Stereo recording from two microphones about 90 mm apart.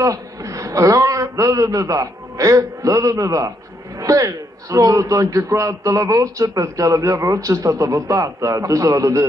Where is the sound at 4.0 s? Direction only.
40° right (ahead or behind).